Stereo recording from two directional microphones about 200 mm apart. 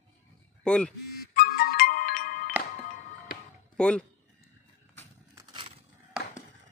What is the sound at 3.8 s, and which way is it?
Speech, 5° left (ahead or behind).